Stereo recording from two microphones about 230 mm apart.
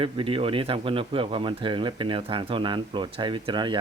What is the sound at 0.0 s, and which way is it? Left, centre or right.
Speech, right.